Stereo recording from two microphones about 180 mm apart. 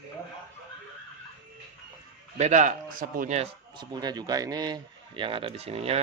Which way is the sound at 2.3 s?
40° right (ahead or behind).